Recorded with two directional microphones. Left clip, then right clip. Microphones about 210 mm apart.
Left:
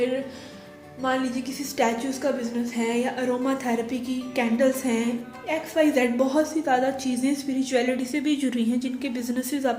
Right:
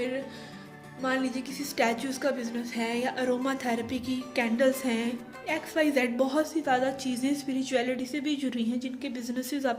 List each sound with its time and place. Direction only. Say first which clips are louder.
1.0 s a woman's voice: left 4 dB; 35° right (ahead or behind)